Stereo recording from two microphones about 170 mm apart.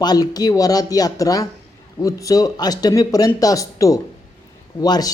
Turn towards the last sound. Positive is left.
turn(degrees=20)  # may be behind; listen again after turning